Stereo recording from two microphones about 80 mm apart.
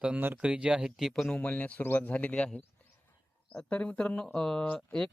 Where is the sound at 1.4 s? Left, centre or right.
Centre.